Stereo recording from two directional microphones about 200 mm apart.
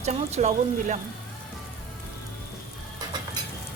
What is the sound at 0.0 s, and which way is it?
Speech, 35° right (ahead or behind).